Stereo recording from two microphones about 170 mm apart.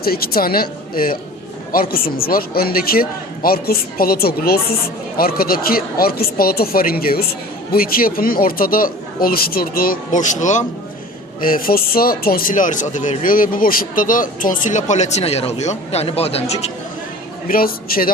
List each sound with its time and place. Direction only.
0.0 s speech: 60° left (ahead or behind); by 10.7 s 45° left (ahead or behind)
11.4 s speech: 55° left (ahead or behind); by 16.7 s 40° left (ahead or behind)
17.5 s speech: 60° left (ahead or behind)